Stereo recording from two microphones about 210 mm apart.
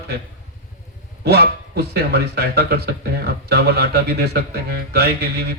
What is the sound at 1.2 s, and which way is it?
Speech, 50° right (ahead or behind).